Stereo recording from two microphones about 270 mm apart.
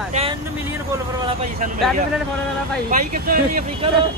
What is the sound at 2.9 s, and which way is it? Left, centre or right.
Speech, right.